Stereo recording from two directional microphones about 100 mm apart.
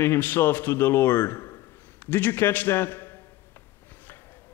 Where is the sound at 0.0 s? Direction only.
20° left (ahead or behind).